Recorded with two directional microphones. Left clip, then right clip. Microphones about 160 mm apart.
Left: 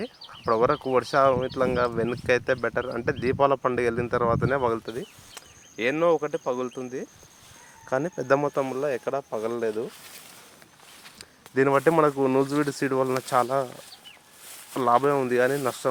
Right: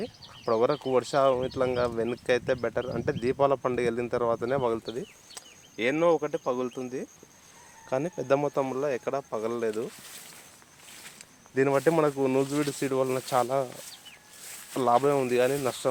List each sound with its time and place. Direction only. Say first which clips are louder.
0.0 s speech: left 3 dB; 20° left (ahead or behind)
7.9 s speech: left 3 dB; 35° left (ahead or behind)
8.5 s speech: left 2 dB; 20° left (ahead or behind)
11.2 s speech: left 3 dB; 25° left (ahead or behind)